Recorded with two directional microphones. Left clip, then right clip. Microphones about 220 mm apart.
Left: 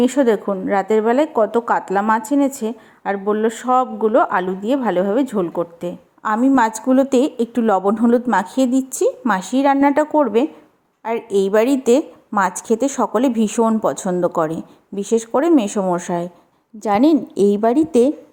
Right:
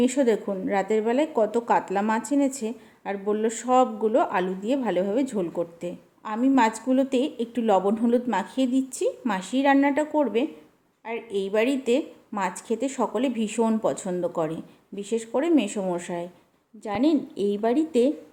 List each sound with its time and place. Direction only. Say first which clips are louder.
0.0 s a woman's voice: left 7 dB; 15° left (ahead or behind); by 18.1 s 30° left (ahead or behind)